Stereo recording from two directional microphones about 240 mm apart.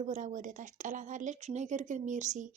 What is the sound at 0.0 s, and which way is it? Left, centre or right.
Speech, right.